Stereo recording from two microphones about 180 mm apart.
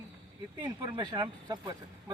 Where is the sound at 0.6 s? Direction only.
25° right (ahead or behind).